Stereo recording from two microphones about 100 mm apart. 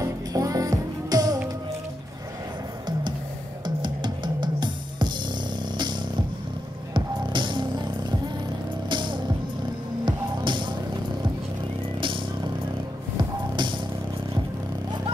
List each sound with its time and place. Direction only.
0.0 s music: 35° right (ahead or behind)
3.6 s music: 50° right (ahead or behind)
6.9 s music: 50° right (ahead or behind)
13.2 s music: 50° right (ahead or behind)